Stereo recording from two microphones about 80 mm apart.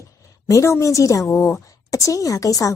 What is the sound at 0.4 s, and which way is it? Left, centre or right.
A woman's voice, left.